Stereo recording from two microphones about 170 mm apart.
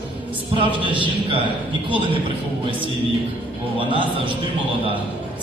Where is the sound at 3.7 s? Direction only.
30° right (ahead or behind).